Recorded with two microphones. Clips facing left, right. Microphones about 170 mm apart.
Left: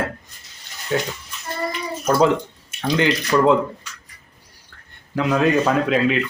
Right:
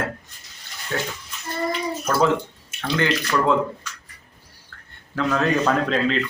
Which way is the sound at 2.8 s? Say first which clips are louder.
Left 3 dB; 15° left (ahead or behind).